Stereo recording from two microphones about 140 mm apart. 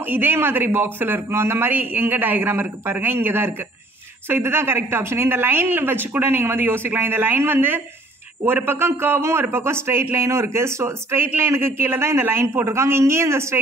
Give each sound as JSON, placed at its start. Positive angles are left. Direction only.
{"t": 0.0, "sound": "a man's voice", "side_deg": -15}